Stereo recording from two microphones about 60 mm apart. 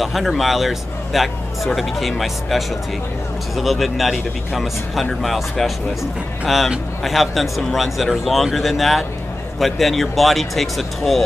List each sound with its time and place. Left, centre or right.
0.0 s speech: centre